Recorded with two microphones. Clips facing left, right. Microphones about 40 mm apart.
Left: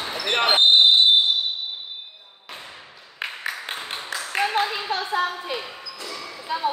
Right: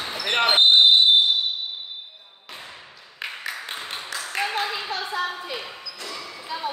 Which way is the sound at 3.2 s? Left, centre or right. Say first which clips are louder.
Left 2 dB; centre.